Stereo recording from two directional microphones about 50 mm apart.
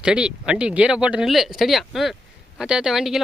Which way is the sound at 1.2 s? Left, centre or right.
Centre.